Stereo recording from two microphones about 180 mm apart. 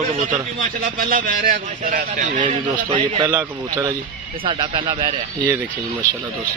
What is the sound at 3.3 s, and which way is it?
Speech, 15° right (ahead or behind).